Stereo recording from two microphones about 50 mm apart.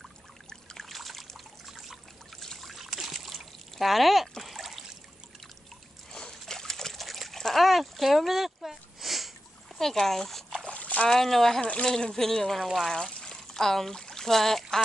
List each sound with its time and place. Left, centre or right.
0.5 s trickle: centre
2.4 s trickle: centre
6.4 s trickle: centre
9.8 s speech: centre
10.6 s vehicle: left
11.1 s speech: centre
13.0 s pour: centre